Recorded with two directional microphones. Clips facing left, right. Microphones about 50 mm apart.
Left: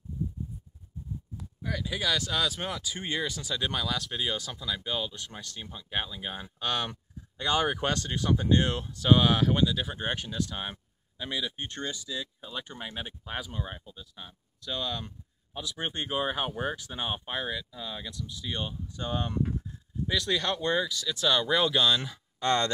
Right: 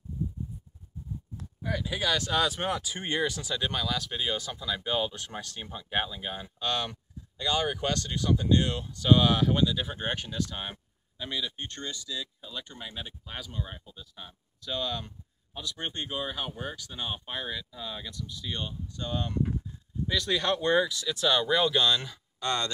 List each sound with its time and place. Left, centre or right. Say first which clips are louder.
1.6 s speech: right 1 dB; centre
2.1 s speech: right 2 dB; right
3.4 s speech: even; centre
4.9 s speech: right 4 dB; right
6.1 s speech: right 1 dB; centre; by 8.8 s left
8.8 s speech: right 1 dB; centre
20.1 s speech: right 1 dB; centre
22.4 s speech: left 4 dB; left